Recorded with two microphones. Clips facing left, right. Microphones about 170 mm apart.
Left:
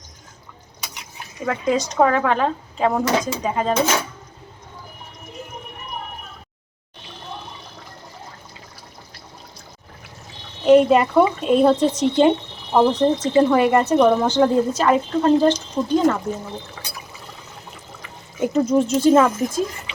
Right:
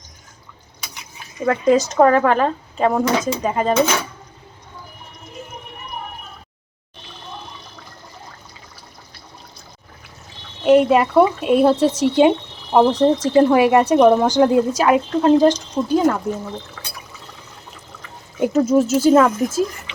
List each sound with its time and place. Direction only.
1.5 s speech: 5° right (ahead or behind)
10.6 s speech: 5° right (ahead or behind)
16.8 s fill: 15° left (ahead or behind)
18.3 s speech: 5° right (ahead or behind)